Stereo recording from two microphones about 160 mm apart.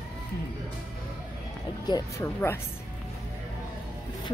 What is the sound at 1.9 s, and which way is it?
Speech, 20° left (ahead or behind).